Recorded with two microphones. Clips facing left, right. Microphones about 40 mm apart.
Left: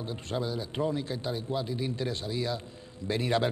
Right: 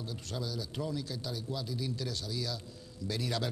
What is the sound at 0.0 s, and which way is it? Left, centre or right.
Speech, left.